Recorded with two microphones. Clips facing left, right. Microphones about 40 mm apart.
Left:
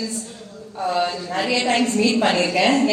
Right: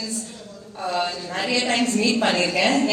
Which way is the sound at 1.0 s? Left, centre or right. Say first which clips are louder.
Left 2 dB; left.